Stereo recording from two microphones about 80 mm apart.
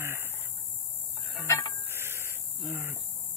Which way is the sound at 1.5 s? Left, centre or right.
Left.